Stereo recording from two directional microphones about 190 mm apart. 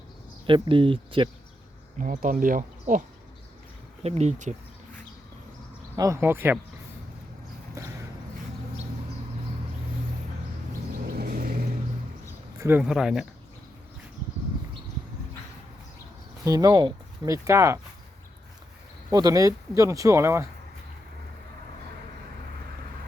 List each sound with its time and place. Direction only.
0.4 s speech: 25° right (ahead or behind)
2.0 s speech: 45° right (ahead or behind)
4.0 s speech: 35° right (ahead or behind)
6.0 s speech: 15° right (ahead or behind)
11.0 s vehicle: 50° right (ahead or behind)
12.5 s speech: 10° right (ahead or behind)
16.4 s speech: 20° right (ahead or behind)
19.1 s speech: 20° right (ahead or behind)